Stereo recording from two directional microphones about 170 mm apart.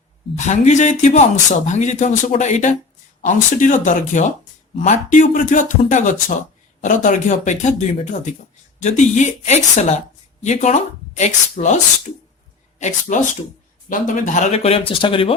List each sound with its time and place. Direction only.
0.3 s speech: 45° left (ahead or behind)
12.8 s speech: 50° left (ahead or behind); by 15.4 s 30° left (ahead or behind)